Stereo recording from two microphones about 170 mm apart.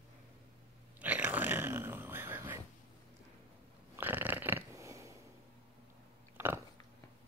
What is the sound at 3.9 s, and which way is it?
Burping, 10° right (ahead or behind).